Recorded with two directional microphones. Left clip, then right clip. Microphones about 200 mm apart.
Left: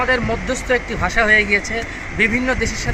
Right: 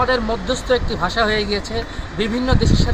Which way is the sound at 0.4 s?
20° left (ahead or behind).